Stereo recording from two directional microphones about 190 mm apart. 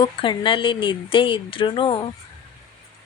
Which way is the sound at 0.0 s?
25° left (ahead or behind).